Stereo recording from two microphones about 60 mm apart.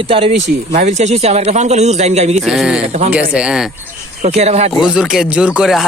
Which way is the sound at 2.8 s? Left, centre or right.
Right.